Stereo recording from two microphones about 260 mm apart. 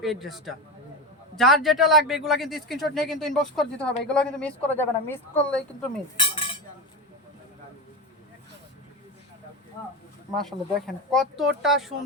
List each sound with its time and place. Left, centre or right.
0.0 s speech: centre
6.1 s cutlery: centre
10.3 s speech: centre